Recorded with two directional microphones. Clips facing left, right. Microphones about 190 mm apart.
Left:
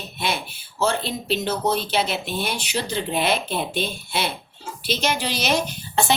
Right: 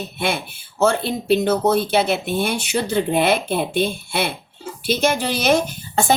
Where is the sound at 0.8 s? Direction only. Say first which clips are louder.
Right 5 dB; 55° right (ahead or behind).